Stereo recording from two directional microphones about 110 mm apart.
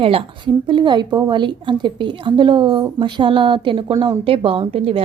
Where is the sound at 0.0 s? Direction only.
55° right (ahead or behind).